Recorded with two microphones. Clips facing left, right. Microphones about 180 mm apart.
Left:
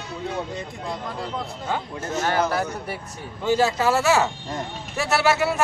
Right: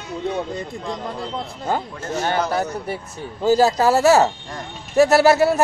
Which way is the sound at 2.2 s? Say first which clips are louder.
Right 1 dB; 25° right (ahead or behind).